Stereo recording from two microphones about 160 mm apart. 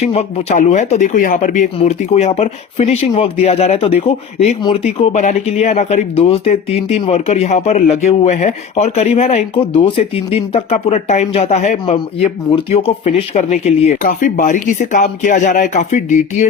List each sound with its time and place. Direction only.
0.0 s speech: 40° left (ahead or behind)
14.0 s speech: 55° left (ahead or behind)